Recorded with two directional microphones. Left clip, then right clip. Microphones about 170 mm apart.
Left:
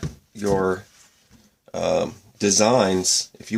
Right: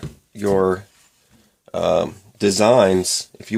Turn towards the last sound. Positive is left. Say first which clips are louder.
# left 2 dB
turn(degrees=-40)  # may be behind; listen again after turning